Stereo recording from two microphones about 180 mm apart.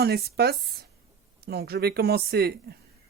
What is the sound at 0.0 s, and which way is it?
Speech, 60° right (ahead or behind).